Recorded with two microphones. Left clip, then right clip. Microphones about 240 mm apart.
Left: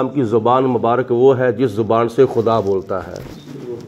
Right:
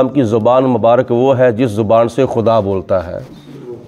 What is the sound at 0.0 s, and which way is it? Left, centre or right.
A man's voice, right.